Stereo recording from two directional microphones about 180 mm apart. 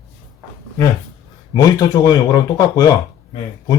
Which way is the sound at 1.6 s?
20° left (ahead or behind).